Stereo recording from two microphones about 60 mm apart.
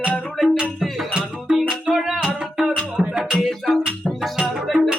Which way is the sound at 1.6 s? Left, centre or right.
Centre.